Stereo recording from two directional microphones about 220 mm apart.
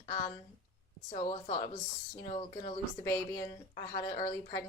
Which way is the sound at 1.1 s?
30° left (ahead or behind).